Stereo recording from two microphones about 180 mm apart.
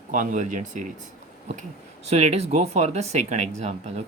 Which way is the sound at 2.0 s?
35° right (ahead or behind).